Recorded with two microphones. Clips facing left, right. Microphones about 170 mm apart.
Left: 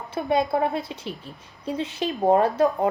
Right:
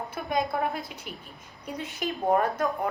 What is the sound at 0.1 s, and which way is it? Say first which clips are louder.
A woman's voice: left 8 dB; 30° left (ahead or behind).